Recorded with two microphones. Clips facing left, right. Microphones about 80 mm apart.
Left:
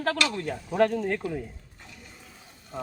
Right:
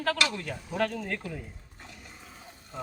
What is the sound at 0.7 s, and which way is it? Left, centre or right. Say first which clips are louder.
Speech: left 7 dB; left.